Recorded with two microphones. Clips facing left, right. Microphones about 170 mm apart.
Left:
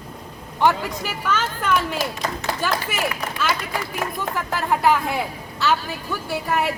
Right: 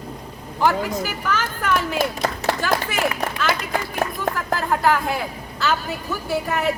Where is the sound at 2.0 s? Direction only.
55° right (ahead or behind).